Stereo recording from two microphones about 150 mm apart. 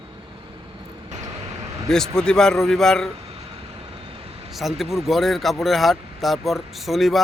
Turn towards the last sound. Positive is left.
turn(degrees=0)  # may be behind; listen again after turning